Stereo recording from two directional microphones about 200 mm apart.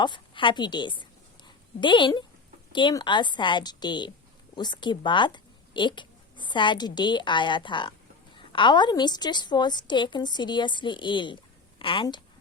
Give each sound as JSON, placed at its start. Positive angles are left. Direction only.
{"t": 0.0, "sound": "a woman's voice", "side_deg": 25}
{"t": 1.5, "sound": "a sound", "side_deg": 25}
{"t": 2.7, "sound": "a woman's voice", "side_deg": 25}